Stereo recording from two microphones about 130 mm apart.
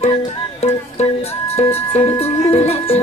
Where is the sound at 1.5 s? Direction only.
50° left (ahead or behind).